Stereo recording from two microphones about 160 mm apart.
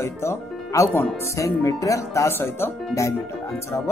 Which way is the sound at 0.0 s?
15° left (ahead or behind).